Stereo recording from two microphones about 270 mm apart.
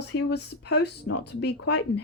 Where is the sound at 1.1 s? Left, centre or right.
Left.